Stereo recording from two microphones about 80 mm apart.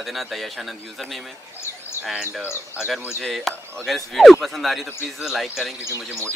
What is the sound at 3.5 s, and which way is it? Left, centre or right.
Speech, centre.